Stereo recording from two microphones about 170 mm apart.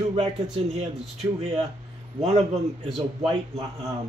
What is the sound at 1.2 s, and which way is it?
Speech, 40° right (ahead or behind).